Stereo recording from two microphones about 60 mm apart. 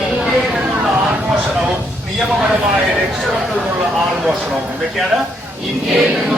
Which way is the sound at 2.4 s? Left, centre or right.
Centre.